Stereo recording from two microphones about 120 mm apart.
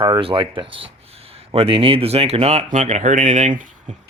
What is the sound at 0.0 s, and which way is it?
Speech, 50° right (ahead or behind).